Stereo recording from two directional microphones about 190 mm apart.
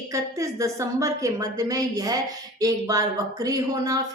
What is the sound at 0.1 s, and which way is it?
Speech, 15° right (ahead or behind).